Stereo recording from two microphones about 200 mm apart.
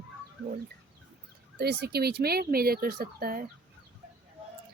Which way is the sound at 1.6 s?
55° right (ahead or behind).